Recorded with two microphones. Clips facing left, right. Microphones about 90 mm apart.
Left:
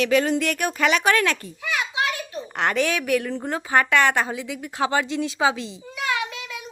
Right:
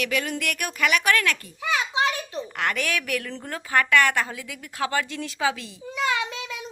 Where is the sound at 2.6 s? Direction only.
25° left (ahead or behind).